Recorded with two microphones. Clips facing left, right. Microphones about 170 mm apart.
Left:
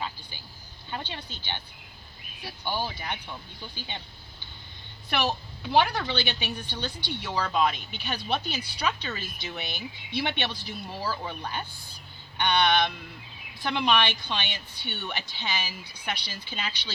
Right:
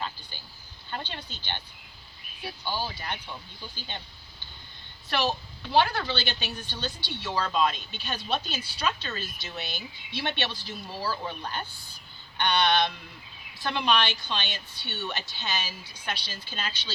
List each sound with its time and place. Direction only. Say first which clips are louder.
0.9 s speech: left 1 dB; 15° left (ahead or behind)
2.6 s a woman's voice: left 2 dB; 20° left (ahead or behind)
5.0 s a woman's voice: even; 15° left (ahead or behind)